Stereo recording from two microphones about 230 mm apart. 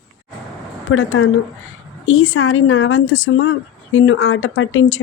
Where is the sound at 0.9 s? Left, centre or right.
Left.